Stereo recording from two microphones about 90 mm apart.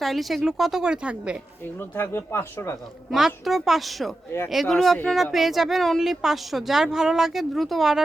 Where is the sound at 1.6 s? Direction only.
20° left (ahead or behind).